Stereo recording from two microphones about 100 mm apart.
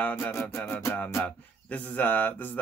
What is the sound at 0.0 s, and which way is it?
Speech, 20° left (ahead or behind).